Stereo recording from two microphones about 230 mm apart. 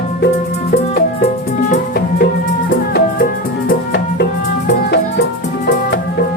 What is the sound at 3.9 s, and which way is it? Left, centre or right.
Music, left.